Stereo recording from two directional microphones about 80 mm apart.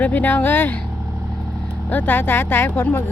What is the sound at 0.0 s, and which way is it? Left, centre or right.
Speech, left.